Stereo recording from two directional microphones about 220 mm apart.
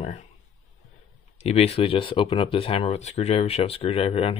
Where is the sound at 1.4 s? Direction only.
30° left (ahead or behind).